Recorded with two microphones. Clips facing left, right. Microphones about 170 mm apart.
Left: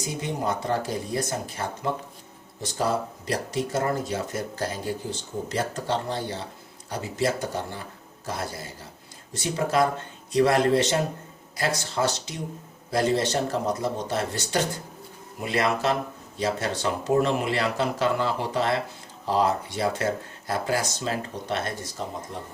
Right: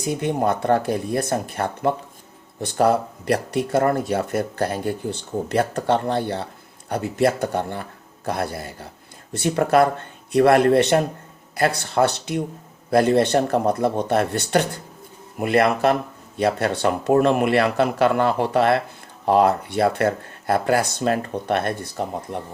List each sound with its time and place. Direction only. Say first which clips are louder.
0.0 s speech: right 7 dB; 60° right (ahead or behind)